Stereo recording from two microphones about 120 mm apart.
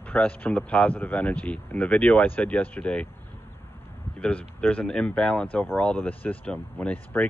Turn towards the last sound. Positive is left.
turn(degrees=15)  # may be behind; listen again after turning